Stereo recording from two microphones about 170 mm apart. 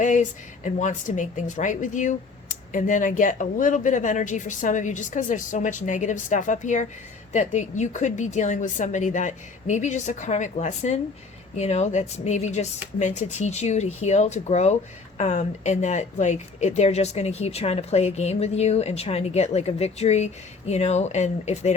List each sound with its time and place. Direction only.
0.0 s speech: 45° left (ahead or behind)